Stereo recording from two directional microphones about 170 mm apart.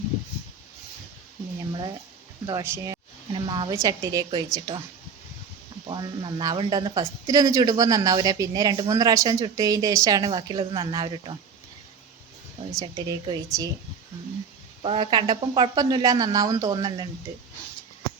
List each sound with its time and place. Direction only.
2.5 s speech: 20° right (ahead or behind)
5.9 s speech: 25° right (ahead or behind)
12.8 s speech: 20° right (ahead or behind)
14.8 s speech: 35° right (ahead or behind)